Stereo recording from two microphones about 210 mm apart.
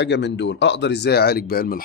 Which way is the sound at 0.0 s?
55° left (ahead or behind).